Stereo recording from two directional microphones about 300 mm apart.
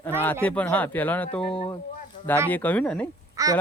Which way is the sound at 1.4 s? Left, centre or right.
Centre.